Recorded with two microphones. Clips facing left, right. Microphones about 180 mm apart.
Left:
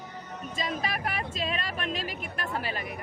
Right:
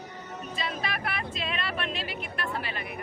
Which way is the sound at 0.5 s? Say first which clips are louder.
Left 2 dB; 40° left (ahead or behind).